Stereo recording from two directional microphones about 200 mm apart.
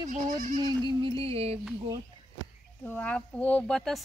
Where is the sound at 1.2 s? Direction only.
30° right (ahead or behind).